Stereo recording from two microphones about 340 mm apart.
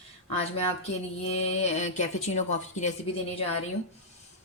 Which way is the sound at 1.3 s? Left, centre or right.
Centre.